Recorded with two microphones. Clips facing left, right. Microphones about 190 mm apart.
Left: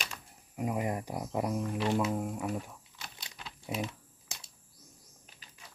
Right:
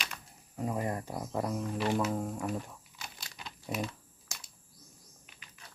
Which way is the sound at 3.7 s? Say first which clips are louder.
Even; 25° left (ahead or behind).